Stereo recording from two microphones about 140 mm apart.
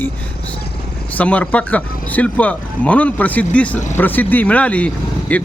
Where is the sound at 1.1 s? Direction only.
10° left (ahead or behind).